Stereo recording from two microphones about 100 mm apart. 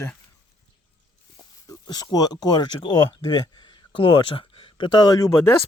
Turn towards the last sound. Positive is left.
turn(degrees=30)  # may be behind; listen again after turning